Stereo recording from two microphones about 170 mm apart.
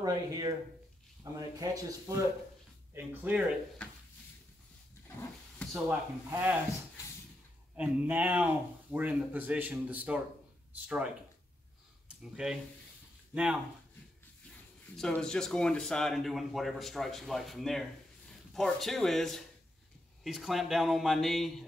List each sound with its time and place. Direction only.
0.0 s speech: 20° right (ahead or behind)
5.9 s speech: 10° right (ahead or behind)
7.7 s speech: 10° right (ahead or behind)
12.2 s speech: 5° right (ahead or behind)
15.0 s speech: 5° left (ahead or behind)